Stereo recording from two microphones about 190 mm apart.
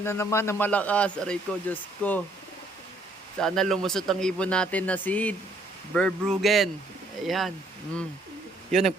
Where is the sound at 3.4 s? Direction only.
Centre (ahead or behind).